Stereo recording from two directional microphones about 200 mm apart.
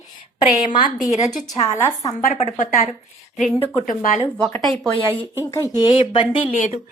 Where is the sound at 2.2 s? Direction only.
35° left (ahead or behind).